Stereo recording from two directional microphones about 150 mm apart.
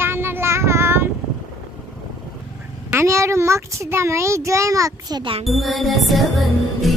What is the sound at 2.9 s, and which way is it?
A child's voice, 20° right (ahead or behind).